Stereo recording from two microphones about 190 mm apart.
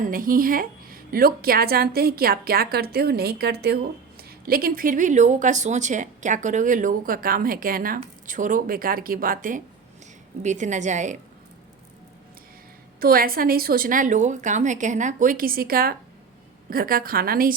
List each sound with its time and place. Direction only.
0.0 s a woman's voice: 45° right (ahead or behind)
13.0 s speech: 50° right (ahead or behind)